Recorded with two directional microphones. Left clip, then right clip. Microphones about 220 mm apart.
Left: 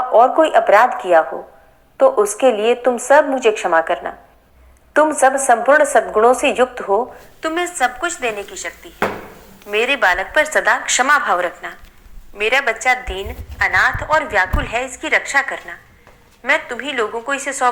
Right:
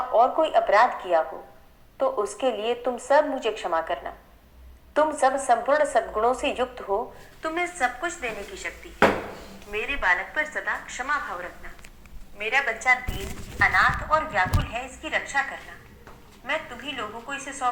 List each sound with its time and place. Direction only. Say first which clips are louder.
0.1 s a woman's voice: left 9 dB; 30° left (ahead or behind)
9.6 s a woman's voice: left 9 dB; 45° left (ahead or behind)